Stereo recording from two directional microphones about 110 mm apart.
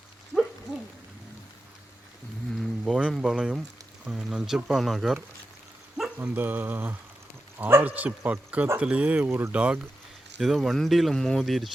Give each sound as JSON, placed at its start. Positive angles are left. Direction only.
{"t": 2.6, "sound": "speech", "side_deg": 0}
{"t": 6.1, "sound": "speech", "side_deg": -15}